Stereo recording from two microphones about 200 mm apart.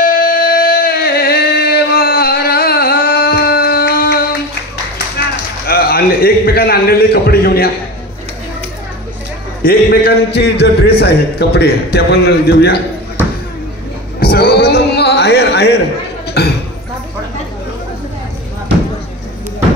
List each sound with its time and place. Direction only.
0.0 s music: 45° left (ahead or behind)
5.7 s a man's voice: 50° left (ahead or behind)
9.6 s a man's voice: 50° left (ahead or behind)
14.2 s a sound: 50° left (ahead or behind)
16.4 s basketball bounce: 55° left (ahead or behind)